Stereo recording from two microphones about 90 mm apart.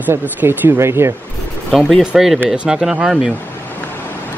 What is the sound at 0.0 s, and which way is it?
Speech, 20° right (ahead or behind).